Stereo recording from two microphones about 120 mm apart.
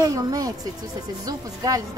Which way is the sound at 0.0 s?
30° right (ahead or behind).